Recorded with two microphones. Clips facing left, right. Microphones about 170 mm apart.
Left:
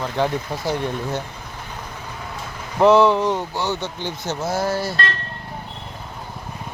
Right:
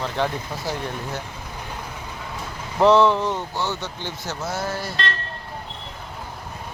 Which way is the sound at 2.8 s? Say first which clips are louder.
Left 2 dB; 10° left (ahead or behind).